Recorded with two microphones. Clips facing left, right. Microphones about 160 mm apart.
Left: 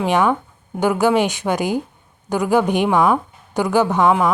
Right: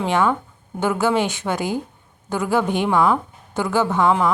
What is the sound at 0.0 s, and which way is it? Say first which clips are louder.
A woman's voice: left 2 dB; 15° left (ahead or behind).